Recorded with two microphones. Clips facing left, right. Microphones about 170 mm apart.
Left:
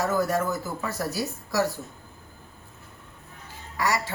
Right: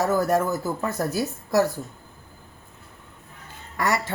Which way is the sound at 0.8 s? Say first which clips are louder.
Right 4 dB; 50° right (ahead or behind).